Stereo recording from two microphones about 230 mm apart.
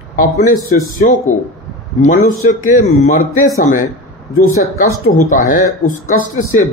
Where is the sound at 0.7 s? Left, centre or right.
Left.